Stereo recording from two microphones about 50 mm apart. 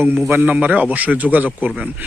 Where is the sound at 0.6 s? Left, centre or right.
Right.